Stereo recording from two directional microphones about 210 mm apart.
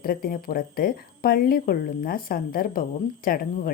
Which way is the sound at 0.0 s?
45° left (ahead or behind).